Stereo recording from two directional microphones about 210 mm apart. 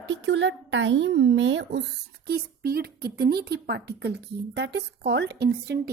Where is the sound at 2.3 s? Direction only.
45° right (ahead or behind).